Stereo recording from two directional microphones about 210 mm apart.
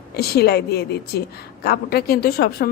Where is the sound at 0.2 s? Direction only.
50° left (ahead or behind).